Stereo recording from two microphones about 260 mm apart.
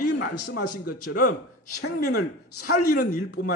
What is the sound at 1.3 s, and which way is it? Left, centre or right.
A man's voice, left.